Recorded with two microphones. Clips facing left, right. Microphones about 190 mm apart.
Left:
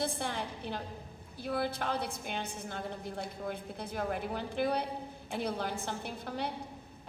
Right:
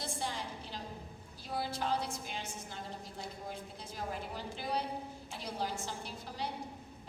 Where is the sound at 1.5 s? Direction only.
60° left (ahead or behind).